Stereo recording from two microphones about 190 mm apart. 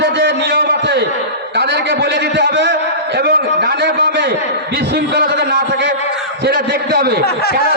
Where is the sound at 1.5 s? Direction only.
65° right (ahead or behind).